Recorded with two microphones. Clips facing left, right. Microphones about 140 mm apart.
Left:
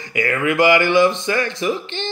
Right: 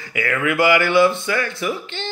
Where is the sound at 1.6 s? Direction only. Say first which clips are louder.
Left 3 dB; 20° left (ahead or behind).